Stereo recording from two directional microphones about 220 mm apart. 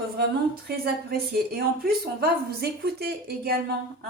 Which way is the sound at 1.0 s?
45° right (ahead or behind).